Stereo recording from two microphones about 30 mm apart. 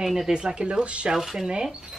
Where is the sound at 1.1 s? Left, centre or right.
Centre.